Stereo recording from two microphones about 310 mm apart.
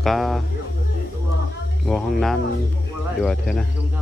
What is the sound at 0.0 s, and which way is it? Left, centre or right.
Speech, centre.